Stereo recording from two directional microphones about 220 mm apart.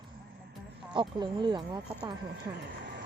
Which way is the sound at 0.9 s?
20° right (ahead or behind).